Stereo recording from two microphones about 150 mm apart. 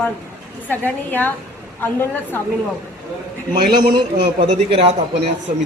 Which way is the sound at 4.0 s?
35° right (ahead or behind).